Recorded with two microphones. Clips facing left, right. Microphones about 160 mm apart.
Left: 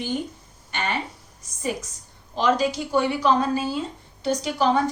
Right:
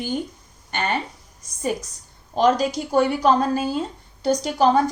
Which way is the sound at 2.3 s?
45° right (ahead or behind).